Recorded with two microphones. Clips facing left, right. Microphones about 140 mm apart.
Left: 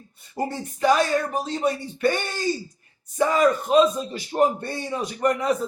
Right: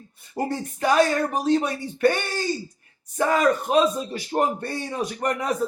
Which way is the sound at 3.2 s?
55° right (ahead or behind).